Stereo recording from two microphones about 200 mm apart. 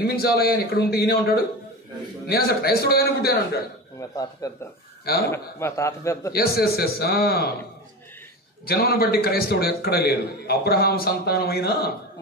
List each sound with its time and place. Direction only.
0.0 s a man's voice: 50° left (ahead or behind)
4.1 s a man's voice: 20° left (ahead or behind)
6.3 s a man's voice: 50° left (ahead or behind)
8.6 s a man's voice: 50° left (ahead or behind)